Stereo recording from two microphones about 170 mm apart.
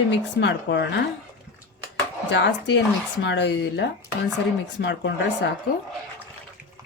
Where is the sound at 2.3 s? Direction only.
90° left.